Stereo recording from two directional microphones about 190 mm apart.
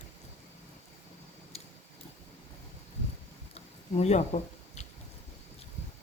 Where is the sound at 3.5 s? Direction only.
35° left (ahead or behind).